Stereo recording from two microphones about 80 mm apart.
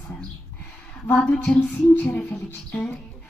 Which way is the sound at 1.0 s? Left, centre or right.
Centre.